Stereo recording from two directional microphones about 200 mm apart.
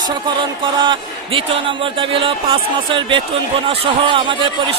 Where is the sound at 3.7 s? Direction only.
25° right (ahead or behind).